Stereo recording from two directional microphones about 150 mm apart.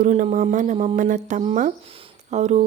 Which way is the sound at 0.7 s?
40° right (ahead or behind).